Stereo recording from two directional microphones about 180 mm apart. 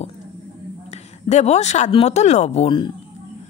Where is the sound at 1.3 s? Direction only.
40° left (ahead or behind).